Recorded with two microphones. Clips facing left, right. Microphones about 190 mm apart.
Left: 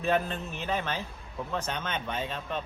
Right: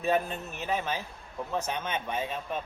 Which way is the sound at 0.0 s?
10° right (ahead or behind).